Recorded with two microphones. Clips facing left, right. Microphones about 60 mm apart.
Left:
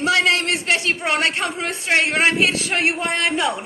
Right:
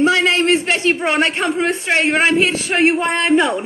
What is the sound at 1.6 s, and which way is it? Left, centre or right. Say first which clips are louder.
A man's voice: right 2 dB; right.